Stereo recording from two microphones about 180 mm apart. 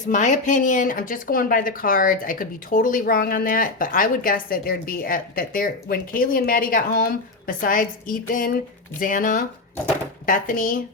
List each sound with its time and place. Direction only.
0.1 s speech: 45° left (ahead or behind)